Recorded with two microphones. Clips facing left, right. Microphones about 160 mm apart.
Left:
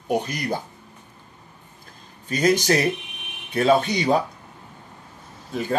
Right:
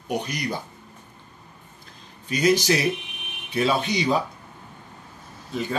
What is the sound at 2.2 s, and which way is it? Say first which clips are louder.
Speech: left 1 dB; 50° left (ahead or behind).